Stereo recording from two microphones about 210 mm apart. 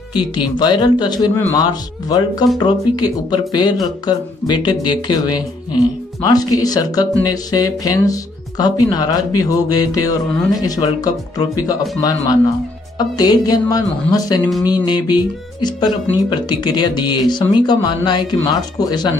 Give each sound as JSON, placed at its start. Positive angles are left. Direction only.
{"t": 0.1, "sound": "speech", "side_deg": 20}